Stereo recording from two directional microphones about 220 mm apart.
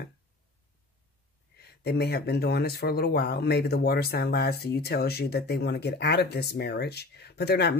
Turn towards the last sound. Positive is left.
turn(degrees=50)  # may be behind; listen again after turning